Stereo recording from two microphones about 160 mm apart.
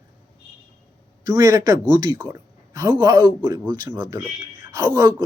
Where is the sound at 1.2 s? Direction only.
20° right (ahead or behind).